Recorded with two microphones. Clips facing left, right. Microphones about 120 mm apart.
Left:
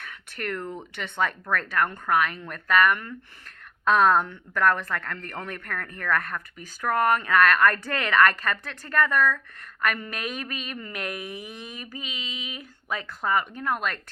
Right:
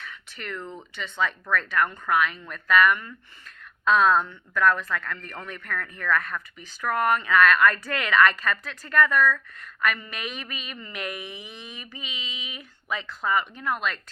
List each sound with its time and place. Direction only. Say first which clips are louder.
0.0 s a sound: left 5 dB; 55° left (ahead or behind)
0.6 s speech: left 3 dB; 15° left (ahead or behind)
0.9 s speech: even; 55° left (ahead or behind); by 3.1 s 40° left (ahead or behind)
3.6 s speech: even; 50° left (ahead or behind); by 9.4 s 25° left (ahead or behind)
9.8 s speech: even; 45° left (ahead or behind)